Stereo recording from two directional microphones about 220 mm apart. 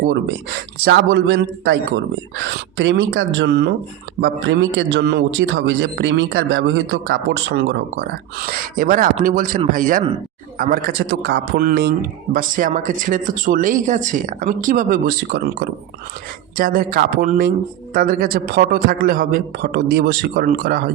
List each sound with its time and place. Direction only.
0.8 s a man's voice: 50° right (ahead or behind)
8.4 s a man's voice: 40° right (ahead or behind)
16.6 s a man's voice: 40° right (ahead or behind)